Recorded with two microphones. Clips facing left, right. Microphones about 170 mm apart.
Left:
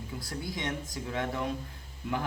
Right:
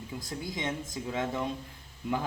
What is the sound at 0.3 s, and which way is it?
A man's voice, 20° right (ahead or behind).